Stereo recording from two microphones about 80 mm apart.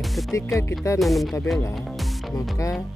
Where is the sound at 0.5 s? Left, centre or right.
Left.